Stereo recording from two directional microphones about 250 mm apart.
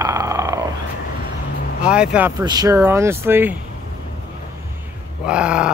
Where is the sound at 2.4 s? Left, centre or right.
Centre.